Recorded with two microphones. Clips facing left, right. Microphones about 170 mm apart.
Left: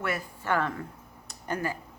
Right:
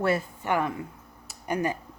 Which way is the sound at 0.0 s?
30° right (ahead or behind).